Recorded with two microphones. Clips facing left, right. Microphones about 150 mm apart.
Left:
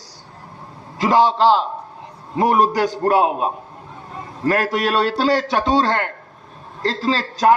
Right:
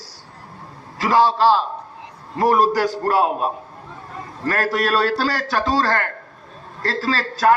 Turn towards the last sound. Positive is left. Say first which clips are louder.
# left 1 dB
turn(degrees=20)  # may be behind; listen again after turning